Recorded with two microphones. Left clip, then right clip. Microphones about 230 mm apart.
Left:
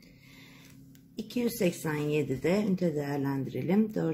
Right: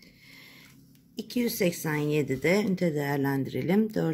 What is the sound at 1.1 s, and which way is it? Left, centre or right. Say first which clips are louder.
Speech: right 2 dB; right.